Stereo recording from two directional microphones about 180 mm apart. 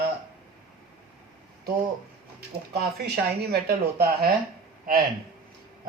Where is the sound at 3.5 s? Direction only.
60° right (ahead or behind).